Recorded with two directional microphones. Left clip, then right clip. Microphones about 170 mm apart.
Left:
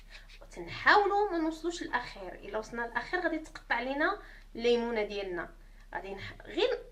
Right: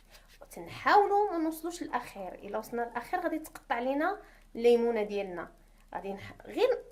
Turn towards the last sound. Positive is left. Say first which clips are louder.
# right 2 dB
turn(degrees=-40)  # may be behind; listen again after turning